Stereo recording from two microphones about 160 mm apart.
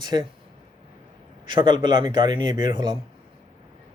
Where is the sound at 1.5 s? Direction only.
30° right (ahead or behind).